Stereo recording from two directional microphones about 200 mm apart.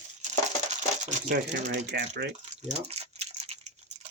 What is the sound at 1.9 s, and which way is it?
Speech, 55° right (ahead or behind).